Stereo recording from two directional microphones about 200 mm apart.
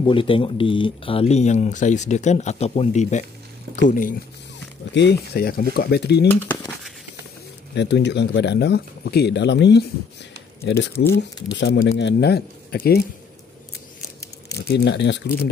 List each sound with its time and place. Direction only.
0.0 s speech: 25° left (ahead or behind); by 4.1 s 40° left (ahead or behind)
4.9 s speech: 55° left (ahead or behind)
6.2 s speech: 10° left (ahead or behind)
7.7 s speech: 60° left (ahead or behind)
14.5 s speech: 55° left (ahead or behind)